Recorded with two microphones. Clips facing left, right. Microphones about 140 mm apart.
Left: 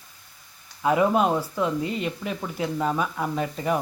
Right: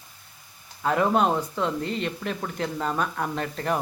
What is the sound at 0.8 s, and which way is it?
Speech, 10° left (ahead or behind).